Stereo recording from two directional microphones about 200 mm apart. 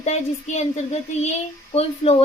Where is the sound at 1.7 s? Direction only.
30° left (ahead or behind).